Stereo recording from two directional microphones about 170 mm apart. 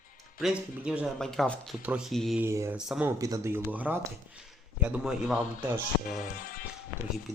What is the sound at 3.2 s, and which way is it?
Speech, 15° right (ahead or behind).